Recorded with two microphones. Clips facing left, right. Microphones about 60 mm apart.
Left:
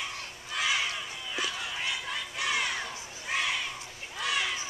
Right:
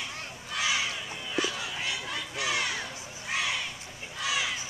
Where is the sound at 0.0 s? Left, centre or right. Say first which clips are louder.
Even; centre.